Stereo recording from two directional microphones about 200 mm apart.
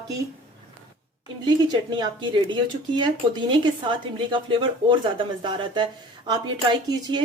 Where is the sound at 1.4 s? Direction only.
20° right (ahead or behind).